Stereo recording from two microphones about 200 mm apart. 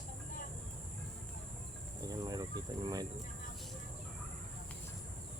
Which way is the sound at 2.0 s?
20° right (ahead or behind).